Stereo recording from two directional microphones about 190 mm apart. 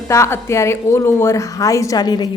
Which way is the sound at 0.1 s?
15° left (ahead or behind).